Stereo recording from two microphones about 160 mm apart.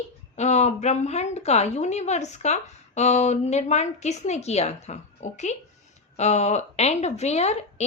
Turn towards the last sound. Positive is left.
turn(degrees=40)  # may be behind; listen again after turning